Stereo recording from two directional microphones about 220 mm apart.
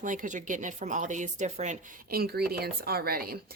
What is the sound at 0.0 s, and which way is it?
Speech, 35° right (ahead or behind).